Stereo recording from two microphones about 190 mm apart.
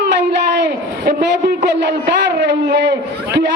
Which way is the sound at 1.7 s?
65° right (ahead or behind).